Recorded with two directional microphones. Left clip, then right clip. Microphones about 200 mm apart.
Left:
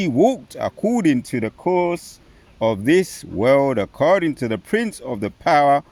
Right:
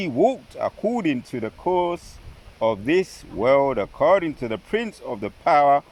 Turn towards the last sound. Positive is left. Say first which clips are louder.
# left 2 dB
turn(degrees=55)  # may be behind; listen again after turning